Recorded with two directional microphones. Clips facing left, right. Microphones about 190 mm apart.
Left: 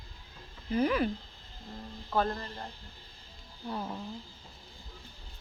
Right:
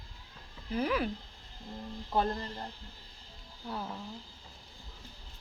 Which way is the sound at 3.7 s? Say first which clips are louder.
Left 2 dB; 5° left (ahead or behind).